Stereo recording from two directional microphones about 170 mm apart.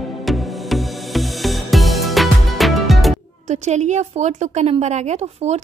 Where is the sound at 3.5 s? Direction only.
45° right (ahead or behind).